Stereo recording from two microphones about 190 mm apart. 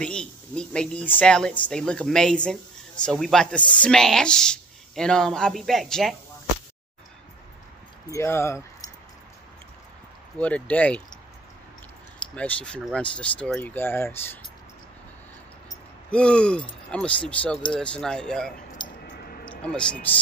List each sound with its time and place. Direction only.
0.0 s speech: 5° left (ahead or behind)
8.1 s speech: 15° left (ahead or behind)
10.4 s speech: 5° left (ahead or behind)
12.4 s speech: 5° left (ahead or behind)
16.1 s speech: 5° left (ahead or behind)
18.8 s a sound: 20° left (ahead or behind)
19.1 s a sound: 50° left (ahead or behind)
19.6 s speech: 5° left (ahead or behind)